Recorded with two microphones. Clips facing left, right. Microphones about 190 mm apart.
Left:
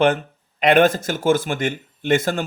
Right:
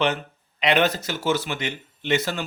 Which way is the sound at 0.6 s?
50° left (ahead or behind).